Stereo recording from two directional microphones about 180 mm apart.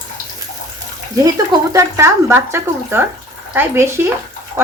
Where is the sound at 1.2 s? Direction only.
20° right (ahead or behind).